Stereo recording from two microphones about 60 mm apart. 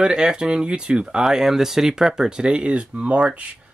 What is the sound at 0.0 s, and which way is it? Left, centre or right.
Speech, centre.